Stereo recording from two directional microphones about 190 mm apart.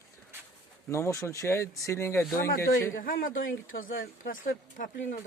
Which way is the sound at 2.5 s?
50° left (ahead or behind).